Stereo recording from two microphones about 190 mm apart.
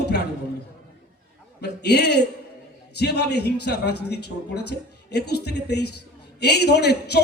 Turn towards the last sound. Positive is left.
turn(degrees=60)  # may be behind; listen again after turning